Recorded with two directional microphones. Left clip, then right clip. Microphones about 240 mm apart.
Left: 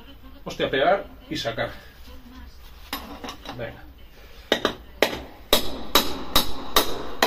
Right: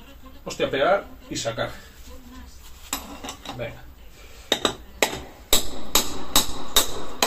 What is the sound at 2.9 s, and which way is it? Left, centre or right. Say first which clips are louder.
Stir: right 1 dB; centre.